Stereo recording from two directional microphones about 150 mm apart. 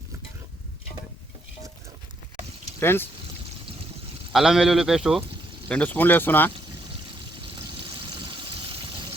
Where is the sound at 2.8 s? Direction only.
15° left (ahead or behind).